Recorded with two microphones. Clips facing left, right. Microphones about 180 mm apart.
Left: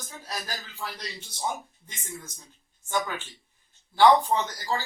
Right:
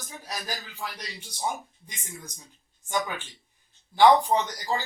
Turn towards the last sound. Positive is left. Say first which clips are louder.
# right 1 dB
turn(degrees=-20)  # may be behind; listen again after turning